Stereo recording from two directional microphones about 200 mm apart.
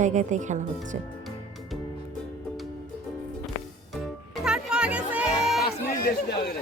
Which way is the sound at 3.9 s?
Centre (ahead or behind).